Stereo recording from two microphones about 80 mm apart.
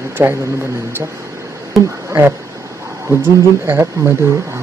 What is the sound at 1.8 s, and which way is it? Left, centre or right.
Speech, centre.